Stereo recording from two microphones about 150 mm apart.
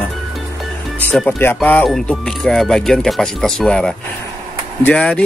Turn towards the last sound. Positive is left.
turn(degrees=5)  # may be behind; listen again after turning